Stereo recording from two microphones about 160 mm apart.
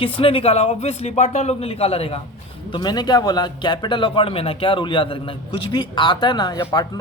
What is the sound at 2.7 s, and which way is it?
Speech, 25° left (ahead or behind).